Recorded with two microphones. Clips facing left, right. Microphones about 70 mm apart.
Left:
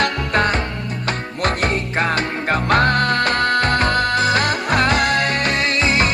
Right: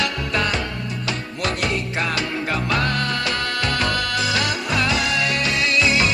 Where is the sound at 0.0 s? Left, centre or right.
Left.